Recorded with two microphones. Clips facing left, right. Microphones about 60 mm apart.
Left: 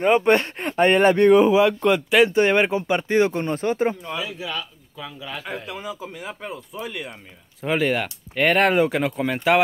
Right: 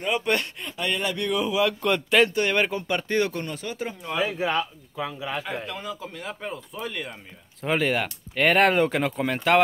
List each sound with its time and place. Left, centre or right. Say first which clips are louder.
0.0 s speech: left 8 dB; left
0.7 s speech: left 13 dB; left
1.8 s speech: left 3 dB; centre
2.2 s speech: left 5 dB; left
4.2 s speech: right 5 dB; right
4.9 s speech: right 4 dB; centre
5.7 s speech: left 2 dB; centre